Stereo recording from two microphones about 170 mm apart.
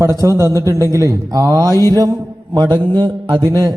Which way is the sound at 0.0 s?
15° right (ahead or behind).